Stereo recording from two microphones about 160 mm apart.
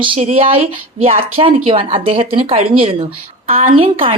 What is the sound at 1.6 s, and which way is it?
A woman's voice, 35° right (ahead or behind).